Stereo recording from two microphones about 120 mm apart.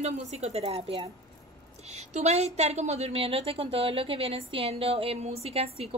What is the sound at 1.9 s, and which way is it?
A woman's voice, 65° right (ahead or behind).